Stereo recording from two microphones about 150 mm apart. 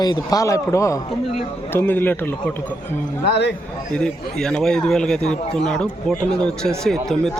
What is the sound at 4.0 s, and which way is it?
Speech, 5° left (ahead or behind).